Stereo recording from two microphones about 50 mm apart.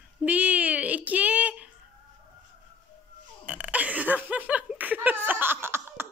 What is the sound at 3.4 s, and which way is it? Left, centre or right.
Hiccup, right.